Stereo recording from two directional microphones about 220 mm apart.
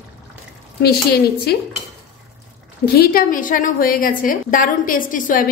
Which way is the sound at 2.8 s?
45° left (ahead or behind).